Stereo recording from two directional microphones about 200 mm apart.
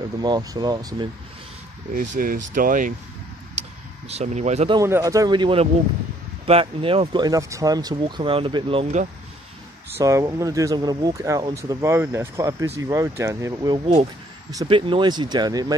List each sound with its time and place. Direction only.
0.2 s speech: 20° right (ahead or behind)
2.0 s speech: 45° right (ahead or behind)
3.6 s vehicle: 35° right (ahead or behind)
4.1 s speech: 35° right (ahead or behind)
4.7 s speech: 15° right (ahead or behind)
9.9 s speech: 15° right (ahead or behind)